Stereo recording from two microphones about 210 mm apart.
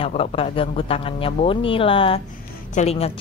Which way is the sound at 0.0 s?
30° left (ahead or behind).